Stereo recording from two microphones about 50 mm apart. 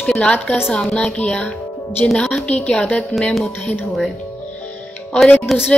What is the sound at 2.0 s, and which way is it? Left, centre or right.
Speech, centre.